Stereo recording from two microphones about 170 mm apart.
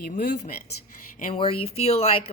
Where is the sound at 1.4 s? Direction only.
35° left (ahead or behind).